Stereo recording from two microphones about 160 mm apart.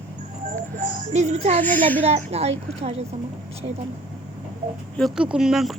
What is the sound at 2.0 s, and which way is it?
Speech, 40° right (ahead or behind).